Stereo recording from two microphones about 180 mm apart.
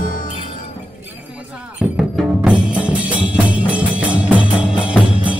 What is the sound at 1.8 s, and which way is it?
Music, 5° right (ahead or behind).